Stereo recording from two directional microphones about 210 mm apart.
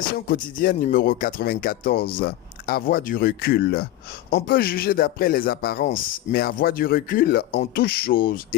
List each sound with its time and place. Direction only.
0.3 s speech: 40° left (ahead or behind)